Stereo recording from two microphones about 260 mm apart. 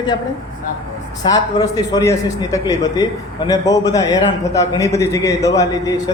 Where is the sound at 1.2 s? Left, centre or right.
Centre.